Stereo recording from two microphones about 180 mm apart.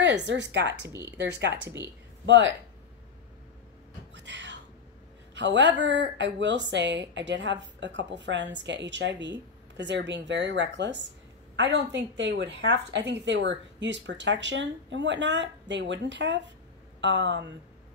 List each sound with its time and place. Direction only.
0.0 s speech: 75° right (ahead or behind)
2.2 s a woman's voice: 85° right
4.1 s a sound: 85° right
5.3 s a woman's voice: 85° right